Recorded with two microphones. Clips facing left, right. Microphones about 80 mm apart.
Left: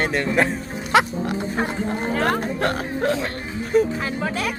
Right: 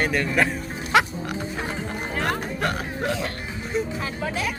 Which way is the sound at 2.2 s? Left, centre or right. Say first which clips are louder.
Left 3 dB; left.